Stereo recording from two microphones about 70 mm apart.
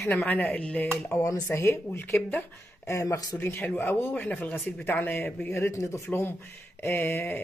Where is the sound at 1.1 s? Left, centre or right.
Left.